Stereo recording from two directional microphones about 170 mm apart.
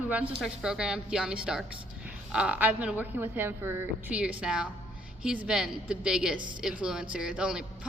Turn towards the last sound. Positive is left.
turn(degrees=-5)  # may be behind; listen again after turning